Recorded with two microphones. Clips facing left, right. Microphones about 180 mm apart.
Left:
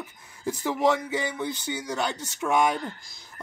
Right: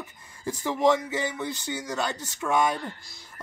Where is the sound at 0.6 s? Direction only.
15° left (ahead or behind).